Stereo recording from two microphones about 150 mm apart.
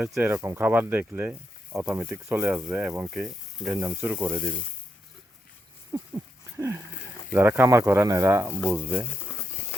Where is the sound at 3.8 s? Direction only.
15° right (ahead or behind).